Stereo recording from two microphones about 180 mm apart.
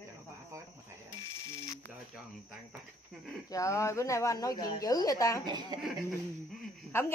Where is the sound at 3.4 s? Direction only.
20° left (ahead or behind).